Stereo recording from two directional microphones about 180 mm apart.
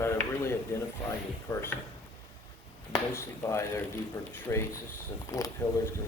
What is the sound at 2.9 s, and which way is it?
A man's voice, 15° left (ahead or behind).